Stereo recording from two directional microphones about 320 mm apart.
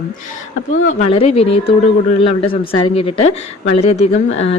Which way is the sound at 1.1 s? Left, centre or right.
Centre.